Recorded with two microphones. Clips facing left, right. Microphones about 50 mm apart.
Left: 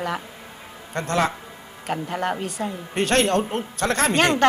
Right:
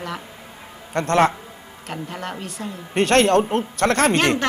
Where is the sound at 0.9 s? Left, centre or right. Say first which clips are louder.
Right 5 dB; right.